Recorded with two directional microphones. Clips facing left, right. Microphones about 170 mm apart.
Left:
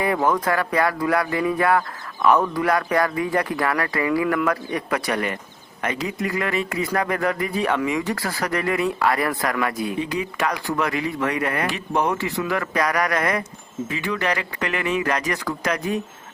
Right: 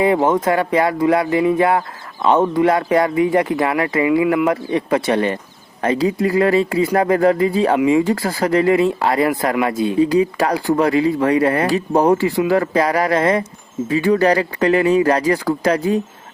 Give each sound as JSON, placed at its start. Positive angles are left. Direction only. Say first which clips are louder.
{"t": 0.0, "sound": "speech", "louder": "right 6 dB", "side_deg": -20}